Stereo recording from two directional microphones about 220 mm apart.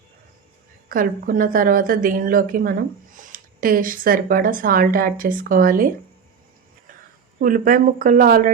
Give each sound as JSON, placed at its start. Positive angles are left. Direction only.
{"t": 0.9, "sound": "a woman's voice", "side_deg": -40}
{"t": 7.3, "sound": "a woman's voice", "side_deg": -40}